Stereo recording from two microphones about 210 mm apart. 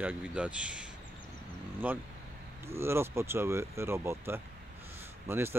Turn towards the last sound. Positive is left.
turn(degrees=-10)  # may be behind; listen again after turning